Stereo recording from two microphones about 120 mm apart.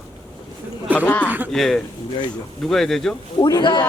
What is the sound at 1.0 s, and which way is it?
Speech, 10° left (ahead or behind).